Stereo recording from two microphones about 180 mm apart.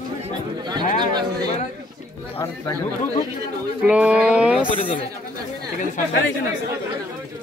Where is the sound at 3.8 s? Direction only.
5° right (ahead or behind).